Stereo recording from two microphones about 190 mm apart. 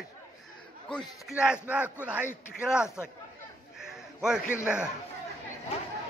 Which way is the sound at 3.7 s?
5° right (ahead or behind).